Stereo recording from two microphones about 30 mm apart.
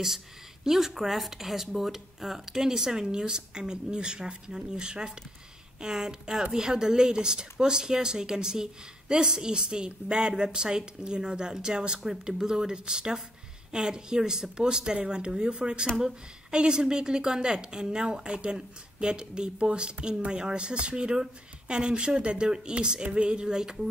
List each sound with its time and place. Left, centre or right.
0.7 s a woman's voice: centre
23.0 s speech: right